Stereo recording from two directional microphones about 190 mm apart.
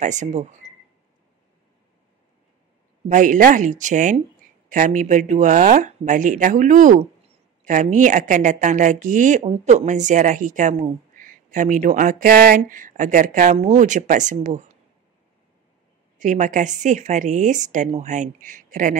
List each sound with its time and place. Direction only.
0.0 s a woman's voice: 40° right (ahead or behind)
3.1 s a woman's voice: 45° right (ahead or behind)
16.2 s a woman's voice: 40° right (ahead or behind)